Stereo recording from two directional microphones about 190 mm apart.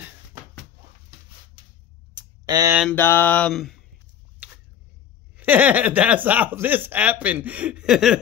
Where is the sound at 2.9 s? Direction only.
10° left (ahead or behind).